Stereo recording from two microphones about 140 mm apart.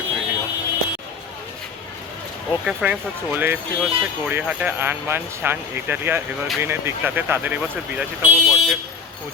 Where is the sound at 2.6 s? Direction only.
10° right (ahead or behind).